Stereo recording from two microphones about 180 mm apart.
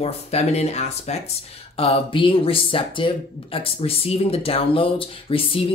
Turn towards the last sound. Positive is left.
turn(degrees=30)  # may be behind; listen again after turning